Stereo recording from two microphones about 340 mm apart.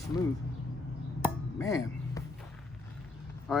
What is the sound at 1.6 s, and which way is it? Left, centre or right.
Speech, centre.